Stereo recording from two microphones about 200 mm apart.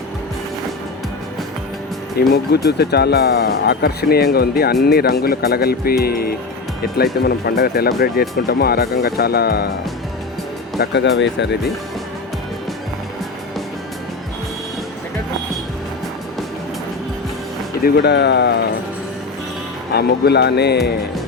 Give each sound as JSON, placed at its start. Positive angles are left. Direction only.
{"t": 2.1, "sound": "speech", "side_deg": 55}
{"t": 10.8, "sound": "speech", "side_deg": 55}
{"t": 17.8, "sound": "speech", "side_deg": 55}
{"t": 19.9, "sound": "speech", "side_deg": 55}